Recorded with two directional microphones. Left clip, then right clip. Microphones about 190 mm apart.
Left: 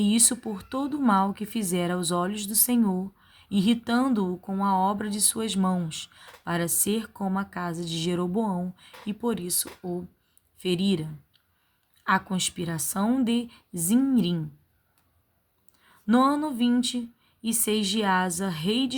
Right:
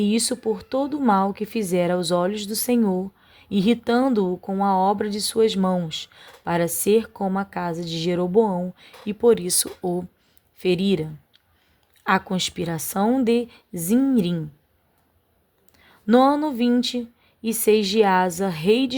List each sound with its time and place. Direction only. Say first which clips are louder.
0.0 s a woman's voice: right 3 dB; 20° right (ahead or behind)
15.9 s a woman's voice: right 6 dB; 25° right (ahead or behind)